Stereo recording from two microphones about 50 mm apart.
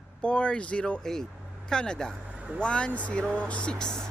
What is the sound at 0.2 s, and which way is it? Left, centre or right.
A man's voice, left.